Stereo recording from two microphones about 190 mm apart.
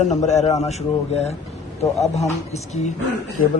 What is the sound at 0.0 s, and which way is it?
A man's voice, 40° left (ahead or behind).